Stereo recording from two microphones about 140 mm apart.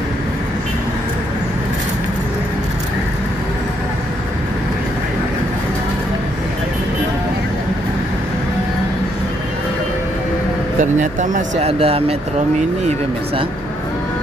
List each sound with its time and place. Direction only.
10.8 s speech: 65° right (ahead or behind)
11.6 s speech: 45° right (ahead or behind)